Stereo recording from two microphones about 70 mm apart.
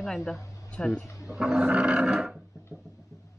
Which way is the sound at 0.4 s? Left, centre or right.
Left.